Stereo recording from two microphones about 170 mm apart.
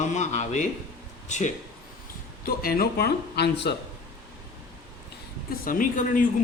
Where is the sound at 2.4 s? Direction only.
60° left (ahead or behind); by 3.7 s 80° left.